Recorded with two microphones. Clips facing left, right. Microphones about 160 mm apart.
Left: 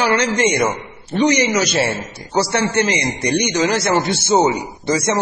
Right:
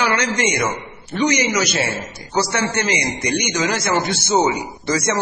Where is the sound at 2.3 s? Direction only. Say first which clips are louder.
Left 3 dB; 30° left (ahead or behind).